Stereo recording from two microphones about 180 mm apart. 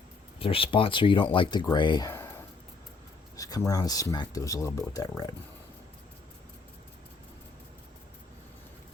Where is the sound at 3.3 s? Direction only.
20° left (ahead or behind).